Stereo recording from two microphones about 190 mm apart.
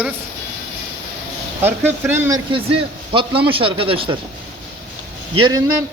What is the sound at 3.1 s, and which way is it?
A man's voice, 30° right (ahead or behind).